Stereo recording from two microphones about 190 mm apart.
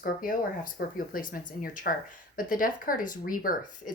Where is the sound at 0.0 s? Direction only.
45° left (ahead or behind).